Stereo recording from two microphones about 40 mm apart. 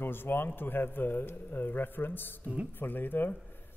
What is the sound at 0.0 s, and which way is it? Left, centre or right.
A man's voice, left.